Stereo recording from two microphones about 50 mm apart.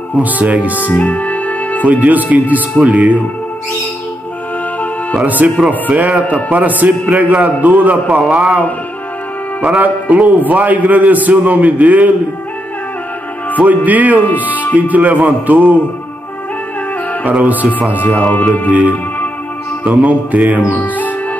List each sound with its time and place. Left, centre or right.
0.2 s a man's voice: right
0.9 s music: left
1.9 s a man's voice: right
5.2 s a man's voice: right
9.8 s a man's voice: right
13.6 s a man's voice: right
14.2 s speech: left
14.7 s a man's voice: right
17.3 s a man's voice: right
17.9 s speech: left
18.4 s music: left
18.7 s a man's voice: right
20.7 s speech: left